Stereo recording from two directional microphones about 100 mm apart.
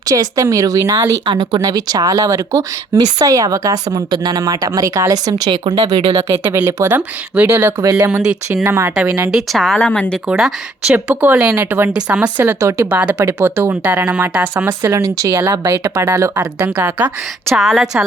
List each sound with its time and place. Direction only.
0.0 s speech: 35° right (ahead or behind)
1.2 s speech: 50° right (ahead or behind)
6.3 s speech: 25° right (ahead or behind)
9.0 s speech: 15° right (ahead or behind)
9.5 s a woman's voice: centre (ahead or behind)
10.2 s a woman's voice: 5° right (ahead or behind)
10.9 s speech: 20° right (ahead or behind)
14.7 s speech: 30° right (ahead or behind)
17.5 s a woman's voice: centre (ahead or behind)